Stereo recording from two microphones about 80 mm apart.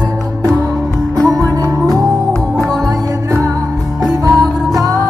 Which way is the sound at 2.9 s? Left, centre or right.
Right.